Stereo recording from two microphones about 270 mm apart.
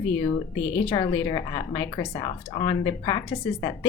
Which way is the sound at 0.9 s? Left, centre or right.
Centre.